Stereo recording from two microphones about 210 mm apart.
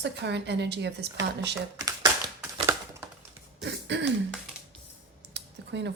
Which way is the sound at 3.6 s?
55° right (ahead or behind).